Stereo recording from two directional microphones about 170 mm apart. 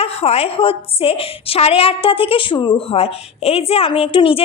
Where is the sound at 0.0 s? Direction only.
35° left (ahead or behind).